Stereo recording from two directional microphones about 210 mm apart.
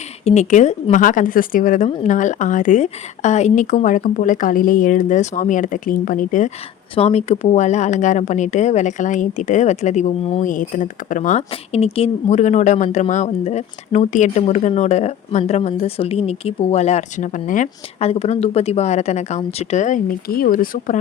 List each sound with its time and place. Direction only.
0.3 s a woman's voice: 35° left (ahead or behind)